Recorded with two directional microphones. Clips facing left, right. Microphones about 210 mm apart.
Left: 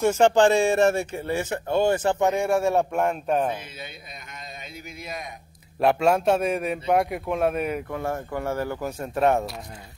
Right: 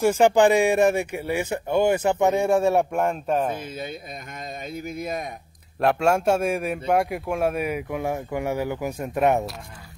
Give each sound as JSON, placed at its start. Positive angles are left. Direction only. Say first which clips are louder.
{"t": 0.0, "sound": "a man's voice", "louder": "right 1 dB", "side_deg": -10}
{"t": 3.1, "sound": "speech", "louder": "even", "side_deg": 5}
{"t": 3.6, "sound": "speech", "louder": "right 8 dB", "side_deg": -50}
{"t": 5.8, "sound": "a man's voice", "louder": "even", "side_deg": 0}